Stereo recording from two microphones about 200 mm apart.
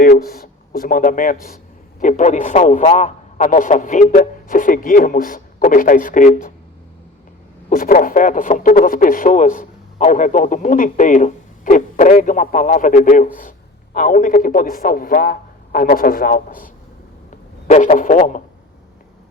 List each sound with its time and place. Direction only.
0.0 s a man's voice: 45° left (ahead or behind)
7.7 s a man's voice: 45° left (ahead or behind)
17.7 s speech: 35° left (ahead or behind)